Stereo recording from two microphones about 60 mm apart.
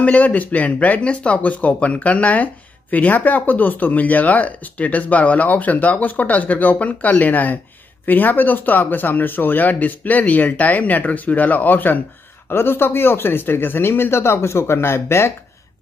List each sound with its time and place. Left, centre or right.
0.0 s speech: left